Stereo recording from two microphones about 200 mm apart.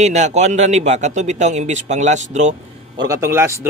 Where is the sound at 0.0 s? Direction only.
35° right (ahead or behind).